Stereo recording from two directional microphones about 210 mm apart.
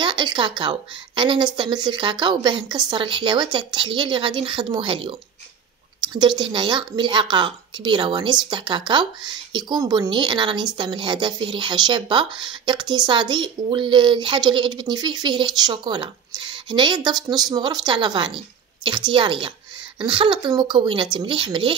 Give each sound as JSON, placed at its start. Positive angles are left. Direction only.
{"t": 0.0, "sound": "speech", "side_deg": -20}